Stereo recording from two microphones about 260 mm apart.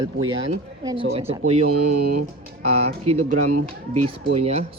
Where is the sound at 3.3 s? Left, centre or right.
Right.